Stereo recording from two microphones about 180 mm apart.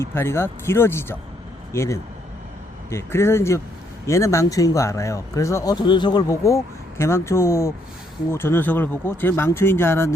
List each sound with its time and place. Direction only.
0.0 s speech: 15° left (ahead or behind)